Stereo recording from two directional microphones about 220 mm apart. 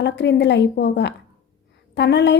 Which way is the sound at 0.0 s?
50° left (ahead or behind).